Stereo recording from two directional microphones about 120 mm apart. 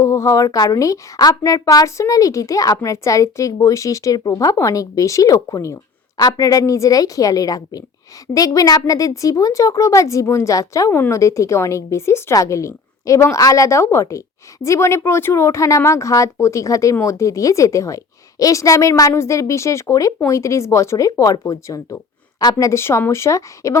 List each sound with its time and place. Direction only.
0.0 s a woman's voice: 25° left (ahead or behind)